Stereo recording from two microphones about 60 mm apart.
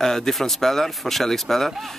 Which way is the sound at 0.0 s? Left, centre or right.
Centre.